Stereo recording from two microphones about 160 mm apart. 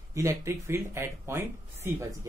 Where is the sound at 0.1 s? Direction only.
20° right (ahead or behind).